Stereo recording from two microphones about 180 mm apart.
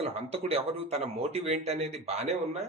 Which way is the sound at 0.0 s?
35° right (ahead or behind).